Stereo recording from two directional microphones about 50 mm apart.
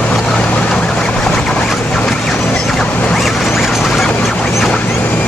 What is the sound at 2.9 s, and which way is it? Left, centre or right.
Zipper, left.